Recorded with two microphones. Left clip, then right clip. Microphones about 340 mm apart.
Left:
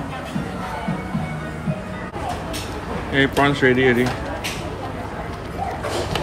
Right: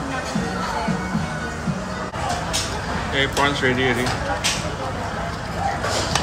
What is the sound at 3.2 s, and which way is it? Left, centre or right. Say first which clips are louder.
Speech: left 3 dB; left.